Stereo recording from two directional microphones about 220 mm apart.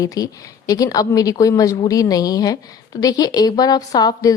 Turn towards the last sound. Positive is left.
turn(degrees=15)  # may be behind; listen again after turning